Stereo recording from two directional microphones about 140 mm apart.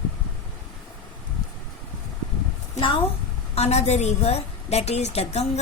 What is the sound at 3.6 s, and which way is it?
A woman's voice, 50° left (ahead or behind).